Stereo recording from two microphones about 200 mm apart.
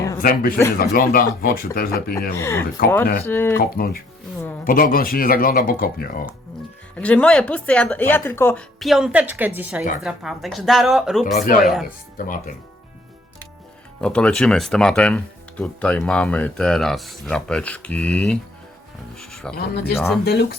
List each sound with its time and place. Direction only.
0.2 s speech: 45° left (ahead or behind)
2.3 s speech: 15° left (ahead or behind)
3.6 s speech: 45° left (ahead or behind)
6.9 s speech: 5° left (ahead or behind)
11.3 s speech: 45° left (ahead or behind)
11.6 s speech: centre (ahead or behind)
11.9 s speech: 45° left (ahead or behind)
14.0 s speech: 5° left (ahead or behind)
19.1 s music: centre (ahead or behind)
19.5 s speech: 50° left (ahead or behind)